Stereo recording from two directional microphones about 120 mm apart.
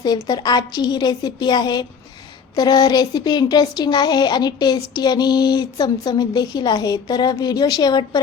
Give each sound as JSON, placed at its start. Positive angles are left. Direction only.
{"t": 0.0, "sound": "speech", "side_deg": 35}